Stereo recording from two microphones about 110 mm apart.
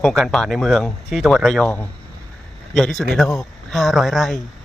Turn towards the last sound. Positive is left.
turn(degrees=0)  # may be behind; listen again after turning